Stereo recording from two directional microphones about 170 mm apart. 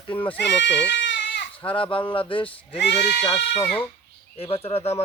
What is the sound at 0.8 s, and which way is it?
Goat, 90° left.